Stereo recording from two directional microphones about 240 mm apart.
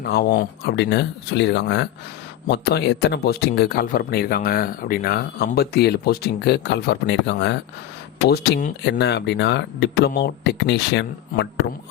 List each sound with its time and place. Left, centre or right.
0.0 s speech: left